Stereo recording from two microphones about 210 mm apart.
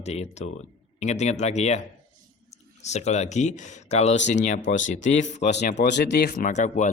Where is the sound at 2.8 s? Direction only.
30° left (ahead or behind).